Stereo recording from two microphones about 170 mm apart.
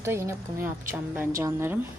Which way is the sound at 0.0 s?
15° right (ahead or behind).